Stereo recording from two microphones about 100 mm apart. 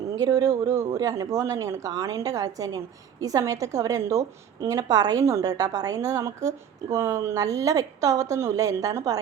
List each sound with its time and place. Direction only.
0.2 s a woman's voice: 40° right (ahead or behind)